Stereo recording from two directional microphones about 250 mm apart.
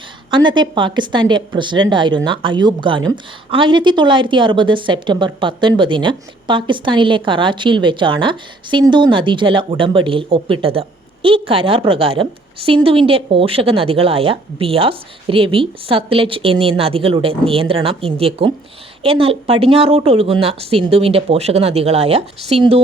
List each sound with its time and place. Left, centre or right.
0.3 s a woman's voice: centre